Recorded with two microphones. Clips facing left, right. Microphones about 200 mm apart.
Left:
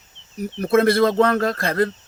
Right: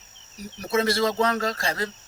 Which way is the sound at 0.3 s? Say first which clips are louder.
Left 8 dB; 55° left (ahead or behind).